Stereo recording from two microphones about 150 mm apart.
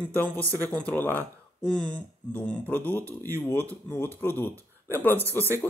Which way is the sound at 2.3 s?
10° left (ahead or behind).